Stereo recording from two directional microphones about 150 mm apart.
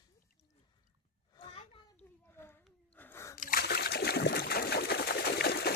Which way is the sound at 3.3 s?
75° left (ahead or behind).